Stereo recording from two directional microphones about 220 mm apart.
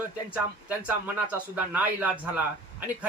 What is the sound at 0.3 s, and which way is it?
A man's voice, 5° right (ahead or behind).